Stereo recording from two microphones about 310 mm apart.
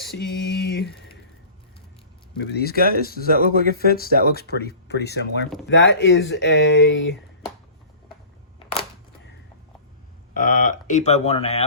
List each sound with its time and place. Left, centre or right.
0.0 s a sound: left
2.4 s speech: left
3.2 s speech: right
4.3 s speech: left
10.3 s speech: left